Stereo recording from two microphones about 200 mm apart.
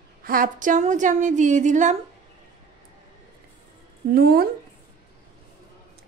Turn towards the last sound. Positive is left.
turn(degrees=-50)  # may be behind; listen again after turning